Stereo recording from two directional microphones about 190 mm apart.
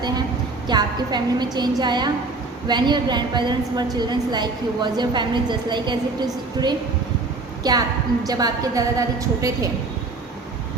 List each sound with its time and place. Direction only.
0.7 s a woman's voice: 20° right (ahead or behind)
7.6 s a woman's voice: 20° right (ahead or behind)